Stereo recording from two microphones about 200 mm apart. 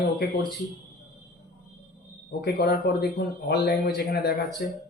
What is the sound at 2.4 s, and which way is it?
Speech, 50° left (ahead or behind).